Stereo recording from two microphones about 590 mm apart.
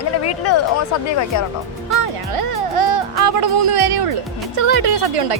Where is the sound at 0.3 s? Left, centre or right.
Left.